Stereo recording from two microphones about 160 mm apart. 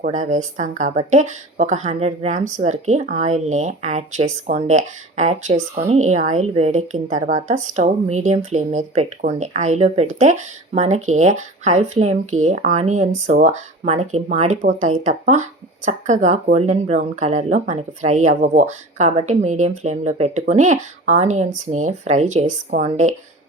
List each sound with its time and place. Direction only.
0.0 s speech: 50° right (ahead or behind)